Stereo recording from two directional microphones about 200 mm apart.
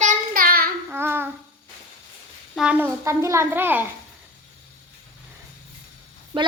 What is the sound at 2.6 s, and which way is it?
A woman's voice, 5° right (ahead or behind).